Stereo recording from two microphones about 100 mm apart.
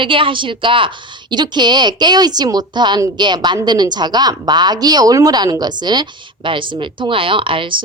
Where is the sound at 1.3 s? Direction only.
45° right (ahead or behind).